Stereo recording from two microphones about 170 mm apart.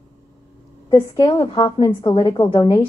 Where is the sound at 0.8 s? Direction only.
30° left (ahead or behind).